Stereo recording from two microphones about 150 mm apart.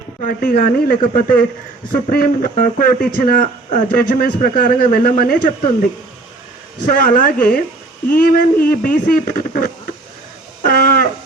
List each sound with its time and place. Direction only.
0.3 s speech: 70° left (ahead or behind)
6.8 s a woman's voice: 65° left (ahead or behind)
10.7 s a sound: 75° left (ahead or behind)